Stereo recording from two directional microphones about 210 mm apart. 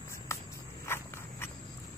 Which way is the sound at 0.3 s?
15° left (ahead or behind).